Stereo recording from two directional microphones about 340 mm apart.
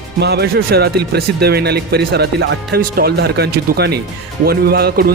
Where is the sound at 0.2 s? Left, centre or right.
Right.